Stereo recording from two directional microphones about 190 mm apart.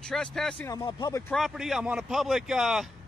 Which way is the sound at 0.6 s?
20° left (ahead or behind).